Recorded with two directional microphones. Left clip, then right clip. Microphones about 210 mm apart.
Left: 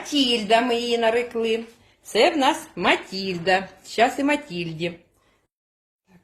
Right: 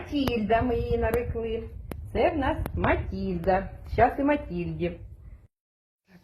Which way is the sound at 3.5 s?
25° left (ahead or behind).